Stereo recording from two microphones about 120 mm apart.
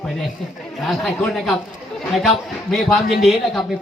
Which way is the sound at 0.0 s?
5° left (ahead or behind).